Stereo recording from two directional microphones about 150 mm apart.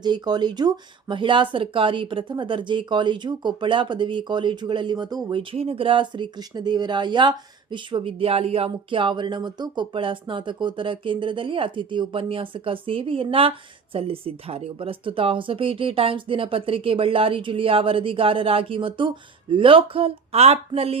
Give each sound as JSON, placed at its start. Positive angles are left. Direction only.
{"t": 0.0, "sound": "speech", "side_deg": -30}